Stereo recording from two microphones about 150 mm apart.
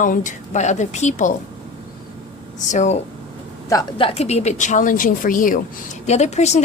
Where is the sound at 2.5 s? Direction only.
55° left (ahead or behind).